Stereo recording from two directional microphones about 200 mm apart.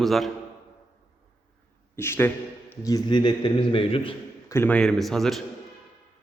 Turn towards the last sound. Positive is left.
turn(degrees=0)  # may be behind; listen again after turning